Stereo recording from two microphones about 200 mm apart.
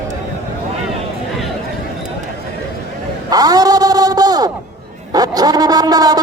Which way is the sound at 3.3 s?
20° right (ahead or behind).